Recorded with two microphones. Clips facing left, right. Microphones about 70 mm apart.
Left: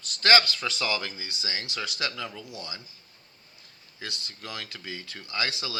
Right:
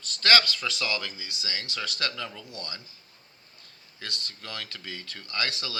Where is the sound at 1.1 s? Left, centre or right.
Left.